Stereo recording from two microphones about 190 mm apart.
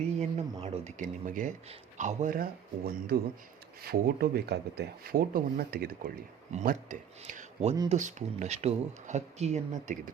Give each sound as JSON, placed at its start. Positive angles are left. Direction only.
{"t": 0.2, "sound": "speech", "side_deg": -35}
{"t": 6.5, "sound": "speech", "side_deg": -40}